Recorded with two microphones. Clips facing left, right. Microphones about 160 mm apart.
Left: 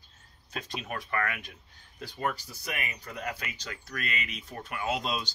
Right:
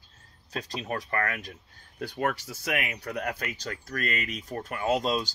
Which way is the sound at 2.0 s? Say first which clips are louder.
Right 4 dB; 70° right (ahead or behind).